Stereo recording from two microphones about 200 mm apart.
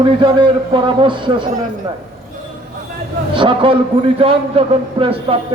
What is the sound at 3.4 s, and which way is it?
A man's voice, 25° right (ahead or behind).